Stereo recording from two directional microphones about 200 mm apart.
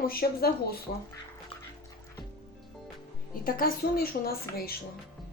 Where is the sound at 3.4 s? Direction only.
45° left (ahead or behind).